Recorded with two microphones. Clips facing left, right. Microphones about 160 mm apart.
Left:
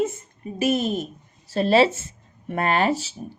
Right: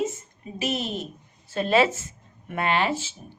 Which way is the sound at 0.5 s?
50° left (ahead or behind).